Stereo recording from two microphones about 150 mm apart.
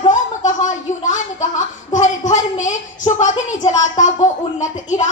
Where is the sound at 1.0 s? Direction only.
55° left (ahead or behind).